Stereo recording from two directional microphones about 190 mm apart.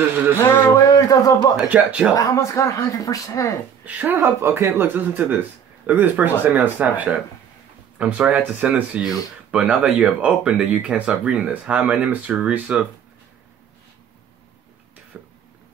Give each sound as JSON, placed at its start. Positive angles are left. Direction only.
{"t": 0.4, "sound": "music", "side_deg": 15}
{"t": 1.6, "sound": "speech", "side_deg": -5}
{"t": 2.1, "sound": "speech", "side_deg": 15}
{"t": 3.8, "sound": "speech", "side_deg": -10}
{"t": 15.1, "sound": "a sound", "side_deg": -10}